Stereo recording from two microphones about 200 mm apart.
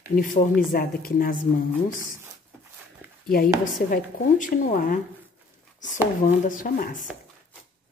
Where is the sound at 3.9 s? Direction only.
40° left (ahead or behind).